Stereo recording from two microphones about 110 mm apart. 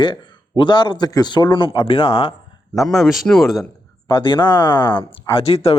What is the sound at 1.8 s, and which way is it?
Speech, 55° left (ahead or behind).